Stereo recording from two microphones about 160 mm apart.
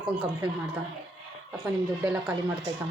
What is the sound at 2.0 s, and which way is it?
Speech, 5° right (ahead or behind).